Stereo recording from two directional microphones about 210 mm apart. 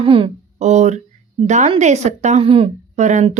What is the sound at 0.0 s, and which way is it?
A woman's voice, 25° right (ahead or behind).